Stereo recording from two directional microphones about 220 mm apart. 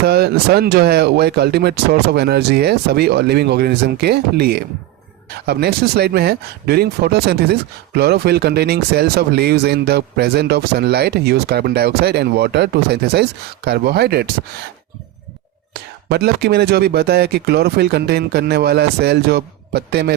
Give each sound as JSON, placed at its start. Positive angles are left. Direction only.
{"t": 0.0, "sound": "speech", "side_deg": -45}
{"t": 15.7, "sound": "speech", "side_deg": -45}